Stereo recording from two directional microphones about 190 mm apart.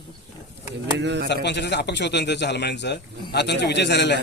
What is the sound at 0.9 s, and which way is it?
Speech, 65° right (ahead or behind).